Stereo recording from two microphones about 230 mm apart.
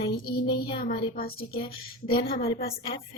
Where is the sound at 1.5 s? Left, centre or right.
Left.